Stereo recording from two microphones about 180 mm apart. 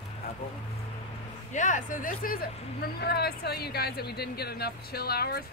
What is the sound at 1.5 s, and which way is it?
Speech, 45° left (ahead or behind).